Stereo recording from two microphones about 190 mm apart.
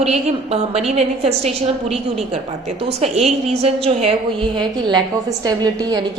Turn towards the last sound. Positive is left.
turn(degrees=-20)  # may be behind; listen again after turning